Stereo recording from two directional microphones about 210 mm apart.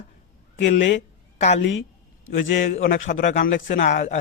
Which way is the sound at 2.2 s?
65° left (ahead or behind).